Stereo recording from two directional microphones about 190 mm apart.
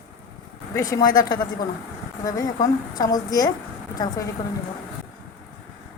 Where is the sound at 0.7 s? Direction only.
20° left (ahead or behind).